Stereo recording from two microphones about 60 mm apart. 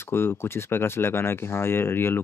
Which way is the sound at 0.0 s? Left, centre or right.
Left.